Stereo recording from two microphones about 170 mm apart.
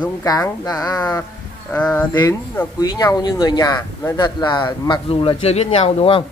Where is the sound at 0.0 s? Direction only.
20° left (ahead or behind).